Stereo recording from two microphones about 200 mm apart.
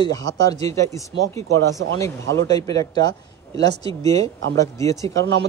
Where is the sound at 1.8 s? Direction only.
80° right.